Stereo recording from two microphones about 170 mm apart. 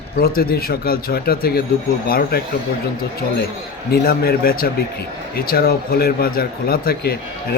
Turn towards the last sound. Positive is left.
turn(degrees=65)  # may be behind; listen again after turning